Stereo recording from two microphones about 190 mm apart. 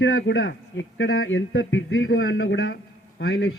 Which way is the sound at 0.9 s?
90° left.